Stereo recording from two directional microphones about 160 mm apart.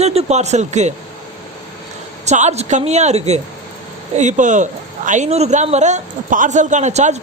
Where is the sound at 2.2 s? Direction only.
45° right (ahead or behind).